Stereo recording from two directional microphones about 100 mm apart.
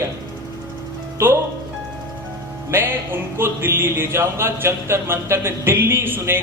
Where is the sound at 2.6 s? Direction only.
25° right (ahead or behind).